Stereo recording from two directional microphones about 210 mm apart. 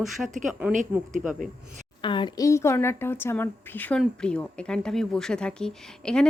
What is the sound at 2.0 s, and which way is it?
Speech, 20° left (ahead or behind).